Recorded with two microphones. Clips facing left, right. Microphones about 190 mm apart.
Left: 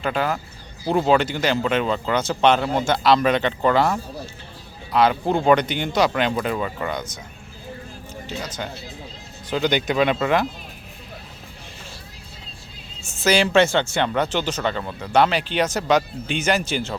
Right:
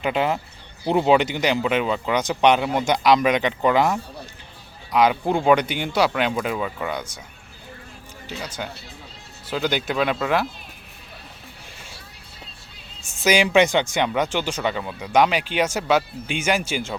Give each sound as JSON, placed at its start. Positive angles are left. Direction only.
{"t": 0.0, "sound": "speech", "side_deg": -20}
{"t": 8.4, "sound": "speech", "side_deg": -10}
{"t": 13.2, "sound": "speech", "side_deg": -15}